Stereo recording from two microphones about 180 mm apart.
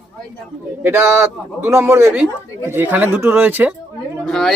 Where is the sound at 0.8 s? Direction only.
15° right (ahead or behind).